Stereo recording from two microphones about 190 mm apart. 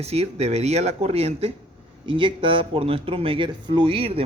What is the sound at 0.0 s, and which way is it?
A man's voice, 35° right (ahead or behind).